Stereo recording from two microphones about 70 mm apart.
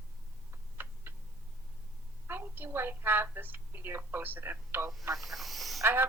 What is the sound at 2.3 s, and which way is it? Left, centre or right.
A woman's voice, right.